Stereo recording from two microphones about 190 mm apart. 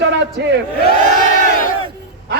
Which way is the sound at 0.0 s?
65° right (ahead or behind).